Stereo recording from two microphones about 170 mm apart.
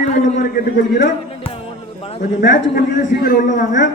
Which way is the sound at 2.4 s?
90° left.